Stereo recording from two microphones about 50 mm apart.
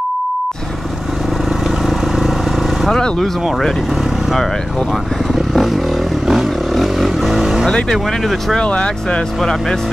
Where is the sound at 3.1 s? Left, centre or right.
Centre.